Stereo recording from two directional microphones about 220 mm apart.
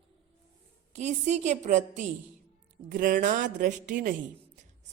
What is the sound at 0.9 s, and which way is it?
Speech, 35° right (ahead or behind).